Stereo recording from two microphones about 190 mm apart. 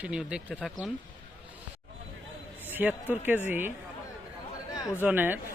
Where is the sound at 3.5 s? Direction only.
10° right (ahead or behind).